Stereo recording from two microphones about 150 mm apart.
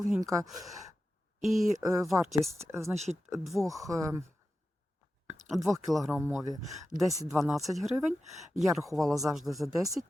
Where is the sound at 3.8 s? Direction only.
20° right (ahead or behind).